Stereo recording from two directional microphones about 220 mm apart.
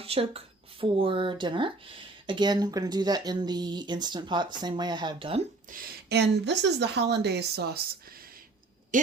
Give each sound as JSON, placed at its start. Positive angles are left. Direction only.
{"t": 0.0, "sound": "speech", "side_deg": -25}
{"t": 5.7, "sound": "speech", "side_deg": -50}